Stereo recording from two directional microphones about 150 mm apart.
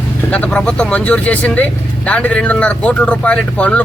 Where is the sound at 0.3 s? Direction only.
10° left (ahead or behind).